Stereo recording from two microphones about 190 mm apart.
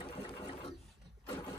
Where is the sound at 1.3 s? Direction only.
25° left (ahead or behind).